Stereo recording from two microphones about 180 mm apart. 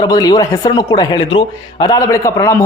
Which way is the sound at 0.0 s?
20° left (ahead or behind).